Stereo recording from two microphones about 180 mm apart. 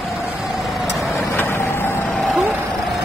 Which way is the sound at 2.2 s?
Centre (ahead or behind).